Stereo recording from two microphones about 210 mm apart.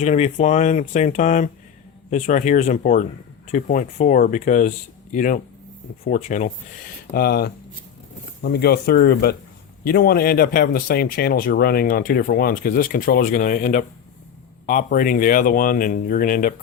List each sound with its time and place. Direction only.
0.0 s speech: 35° left (ahead or behind)
7.1 s speech: 45° left (ahead or behind)